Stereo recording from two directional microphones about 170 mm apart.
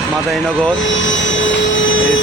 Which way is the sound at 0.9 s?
90° left.